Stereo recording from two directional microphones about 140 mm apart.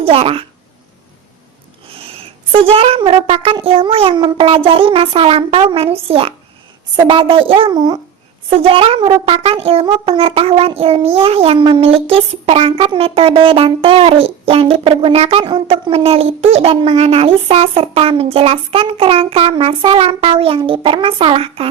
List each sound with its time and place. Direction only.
0.0 s a child's voice: 45° right (ahead or behind)
1.9 s a child's voice: 45° right (ahead or behind)